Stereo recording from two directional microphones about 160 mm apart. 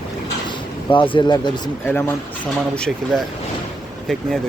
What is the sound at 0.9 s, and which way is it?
Speech, 30° left (ahead or behind).